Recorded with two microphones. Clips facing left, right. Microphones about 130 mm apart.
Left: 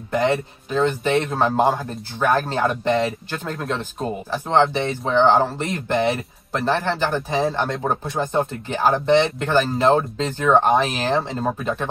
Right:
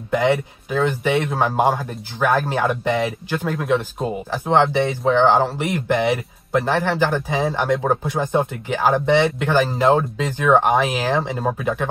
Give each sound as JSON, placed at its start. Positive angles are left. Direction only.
{"t": 0.1, "sound": "speech", "side_deg": -20}